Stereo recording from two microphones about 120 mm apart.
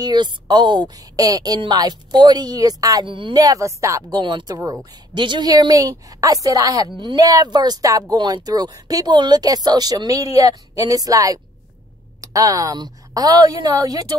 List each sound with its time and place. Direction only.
0.0 s a woman's voice: 35° right (ahead or behind)
3.1 s a woman's voice: 40° right (ahead or behind); by 4.2 s 25° right (ahead or behind)
4.2 s a woman's voice: 40° right (ahead or behind)